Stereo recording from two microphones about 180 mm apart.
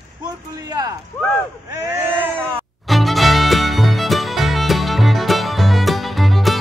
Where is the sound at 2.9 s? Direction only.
Centre (ahead or behind).